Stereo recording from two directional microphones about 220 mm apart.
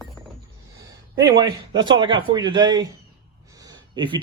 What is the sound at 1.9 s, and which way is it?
Speech, 20° right (ahead or behind).